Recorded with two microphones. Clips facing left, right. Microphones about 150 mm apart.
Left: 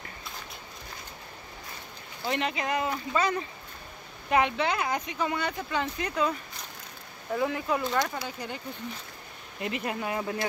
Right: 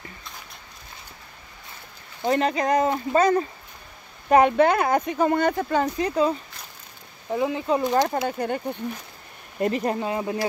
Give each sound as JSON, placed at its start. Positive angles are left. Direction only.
{"t": 2.2, "sound": "speech", "side_deg": -40}
{"t": 5.9, "sound": "speech", "side_deg": -30}
{"t": 7.3, "sound": "speech", "side_deg": -20}
{"t": 8.0, "sound": "speech", "side_deg": -50}
{"t": 9.6, "sound": "speech", "side_deg": -40}
{"t": 9.9, "sound": "speech", "side_deg": -25}